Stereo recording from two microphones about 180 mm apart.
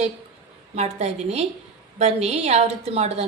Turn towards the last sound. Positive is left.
turn(degrees=-35)  # may be behind; listen again after turning